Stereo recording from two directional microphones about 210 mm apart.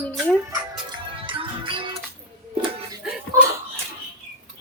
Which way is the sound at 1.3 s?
25° right (ahead or behind).